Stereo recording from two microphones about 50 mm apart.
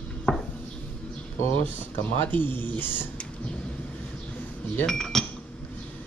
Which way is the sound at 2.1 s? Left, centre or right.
Left.